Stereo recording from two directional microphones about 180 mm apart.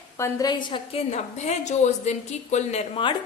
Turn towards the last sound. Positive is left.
turn(degrees=30)  # may be behind; listen again after turning